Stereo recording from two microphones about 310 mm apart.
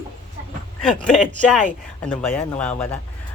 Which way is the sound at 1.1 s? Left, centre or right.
Centre.